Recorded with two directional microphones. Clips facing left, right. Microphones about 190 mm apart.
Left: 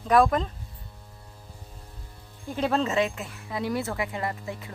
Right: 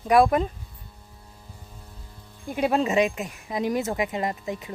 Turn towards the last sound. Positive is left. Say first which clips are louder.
# right 4 dB
turn(degrees=-15)  # may be behind; listen again after turning